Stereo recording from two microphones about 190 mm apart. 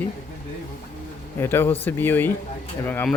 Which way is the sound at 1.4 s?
10° left (ahead or behind).